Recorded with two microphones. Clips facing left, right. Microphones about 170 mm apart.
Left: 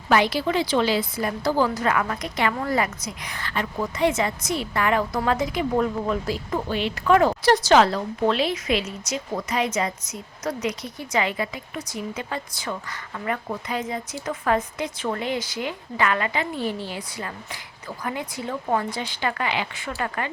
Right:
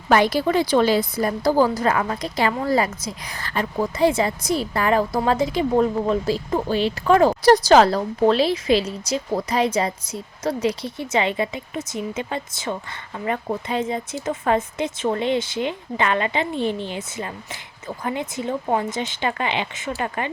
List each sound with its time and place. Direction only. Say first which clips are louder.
0.1 s a woman's voice: right 3 dB; 45° right (ahead or behind); by 20.3 s 20° right (ahead or behind)